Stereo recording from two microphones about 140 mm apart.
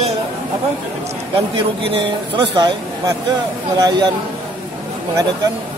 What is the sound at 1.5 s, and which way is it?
A man's voice, 35° right (ahead or behind).